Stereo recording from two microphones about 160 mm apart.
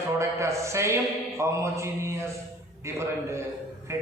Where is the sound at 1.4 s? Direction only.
20° right (ahead or behind).